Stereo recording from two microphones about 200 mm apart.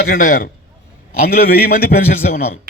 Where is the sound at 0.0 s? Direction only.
50° left (ahead or behind).